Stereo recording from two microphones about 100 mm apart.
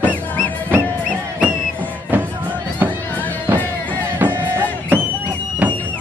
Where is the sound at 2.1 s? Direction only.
20° right (ahead or behind).